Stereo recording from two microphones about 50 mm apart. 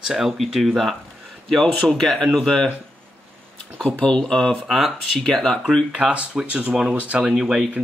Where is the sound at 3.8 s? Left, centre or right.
Centre.